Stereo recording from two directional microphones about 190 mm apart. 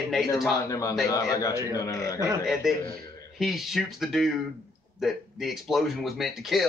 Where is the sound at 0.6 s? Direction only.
15° left (ahead or behind).